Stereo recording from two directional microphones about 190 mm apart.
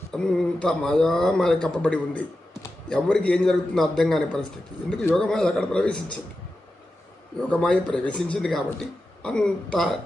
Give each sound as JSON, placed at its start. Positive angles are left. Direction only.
{"t": 0.1, "sound": "a man's voice", "side_deg": 5}
{"t": 7.5, "sound": "a man's voice", "side_deg": 5}